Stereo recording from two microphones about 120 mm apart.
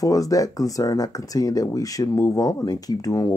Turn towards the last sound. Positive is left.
turn(degrees=30)  # may be behind; listen again after turning